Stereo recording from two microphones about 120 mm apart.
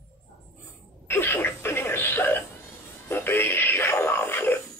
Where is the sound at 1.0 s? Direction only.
20° left (ahead or behind).